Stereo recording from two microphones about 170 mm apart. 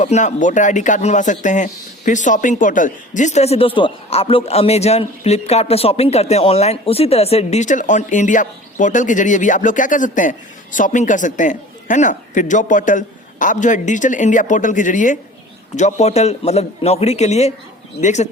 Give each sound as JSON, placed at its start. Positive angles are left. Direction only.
{"t": 0.0, "sound": "a man's voice", "side_deg": 45}